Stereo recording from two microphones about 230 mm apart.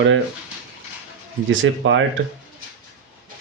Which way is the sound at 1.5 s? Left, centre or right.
Right.